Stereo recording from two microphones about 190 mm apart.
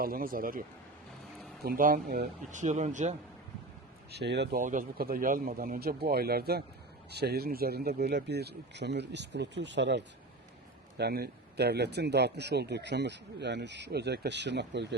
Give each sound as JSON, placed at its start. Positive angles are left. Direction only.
{"t": 0.0, "sound": "speech", "side_deg": -50}
{"t": 1.6, "sound": "speech", "side_deg": -50}
{"t": 4.1, "sound": "speech", "side_deg": -60}
{"t": 4.6, "sound": "speech", "side_deg": -45}
{"t": 10.9, "sound": "speech", "side_deg": -55}